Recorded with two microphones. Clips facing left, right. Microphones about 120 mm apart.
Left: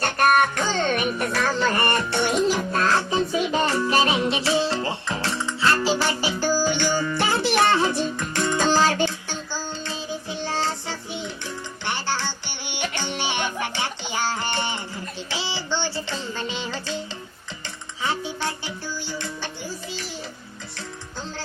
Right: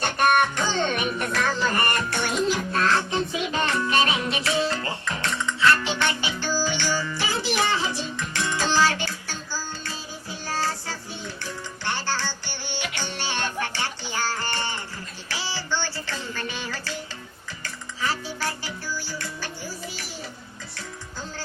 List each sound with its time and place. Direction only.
0.0 s music: centre (ahead or behind)
1.5 s music: 25° left (ahead or behind); by 8.8 s 45° left (ahead or behind)
8.8 s music: 25° left (ahead or behind)